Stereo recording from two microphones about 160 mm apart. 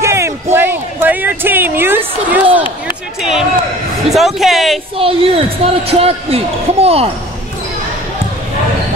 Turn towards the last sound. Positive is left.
turn(degrees=-40)  # may be behind; listen again after turning